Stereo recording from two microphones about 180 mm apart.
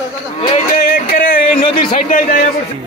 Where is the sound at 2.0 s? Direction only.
45° left (ahead or behind).